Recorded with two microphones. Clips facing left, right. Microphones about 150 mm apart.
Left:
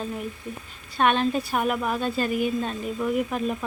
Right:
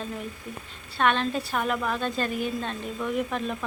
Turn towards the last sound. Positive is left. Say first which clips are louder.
# left 3 dB
turn(degrees=10)  # may be behind; listen again after turning